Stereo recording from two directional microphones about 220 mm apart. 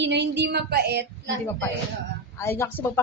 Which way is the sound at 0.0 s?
50° right (ahead or behind).